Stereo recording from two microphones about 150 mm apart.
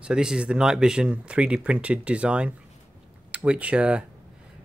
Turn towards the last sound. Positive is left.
turn(degrees=-5)  # may be behind; listen again after turning